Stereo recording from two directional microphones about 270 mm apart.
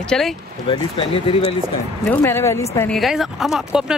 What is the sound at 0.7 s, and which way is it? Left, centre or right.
Speech, centre.